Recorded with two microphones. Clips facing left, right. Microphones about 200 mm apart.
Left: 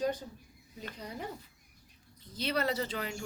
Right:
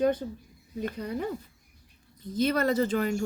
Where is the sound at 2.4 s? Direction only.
50° right (ahead or behind).